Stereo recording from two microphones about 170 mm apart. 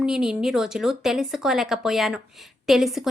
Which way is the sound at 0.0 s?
5° right (ahead or behind).